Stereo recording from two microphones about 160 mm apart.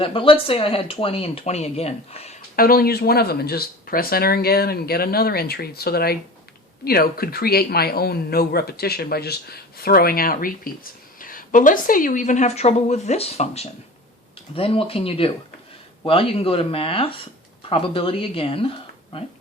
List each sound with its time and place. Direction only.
0.0 s speech: 35° left (ahead or behind)
2.6 s speech: 65° left (ahead or behind); by 19.2 s 35° left (ahead or behind)